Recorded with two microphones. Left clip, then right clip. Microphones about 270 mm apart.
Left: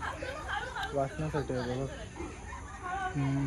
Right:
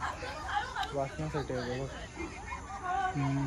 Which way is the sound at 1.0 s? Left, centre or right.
Left.